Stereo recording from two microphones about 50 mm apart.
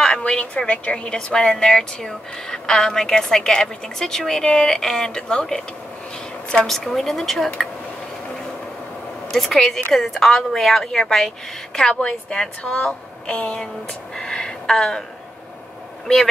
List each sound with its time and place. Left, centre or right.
0.2 s a woman's voice: left
9.3 s a woman's voice: centre
16.1 s a woman's voice: centre